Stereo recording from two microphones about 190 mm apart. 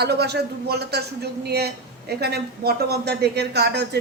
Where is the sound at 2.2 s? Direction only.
55° right (ahead or behind).